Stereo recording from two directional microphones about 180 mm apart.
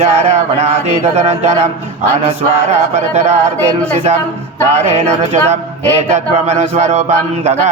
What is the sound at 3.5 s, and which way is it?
Speech, 10° left (ahead or behind).